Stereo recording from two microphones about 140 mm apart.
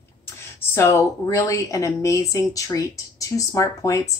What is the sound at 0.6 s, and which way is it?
Speech, 20° left (ahead or behind).